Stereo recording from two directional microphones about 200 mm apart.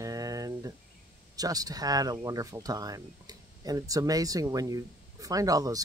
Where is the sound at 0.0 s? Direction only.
15° right (ahead or behind).